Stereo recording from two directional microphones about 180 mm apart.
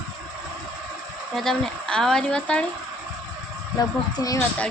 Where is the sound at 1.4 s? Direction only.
5° left (ahead or behind).